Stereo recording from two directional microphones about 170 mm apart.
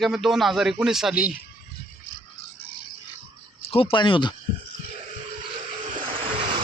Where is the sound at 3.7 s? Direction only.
35° left (ahead or behind).